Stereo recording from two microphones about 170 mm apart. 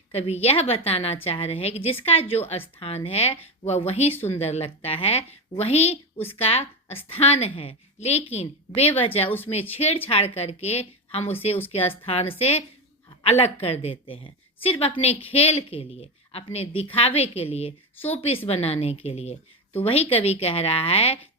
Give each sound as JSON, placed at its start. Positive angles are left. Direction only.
{"t": 0.1, "sound": "a woman's voice", "side_deg": 35}